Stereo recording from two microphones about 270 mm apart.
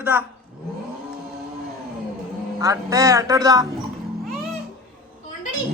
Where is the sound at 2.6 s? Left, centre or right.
Centre.